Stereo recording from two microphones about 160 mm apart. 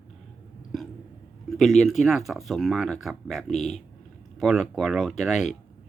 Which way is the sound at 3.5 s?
45° left (ahead or behind).